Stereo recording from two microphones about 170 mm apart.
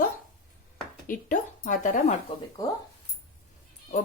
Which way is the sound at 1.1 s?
50° left (ahead or behind).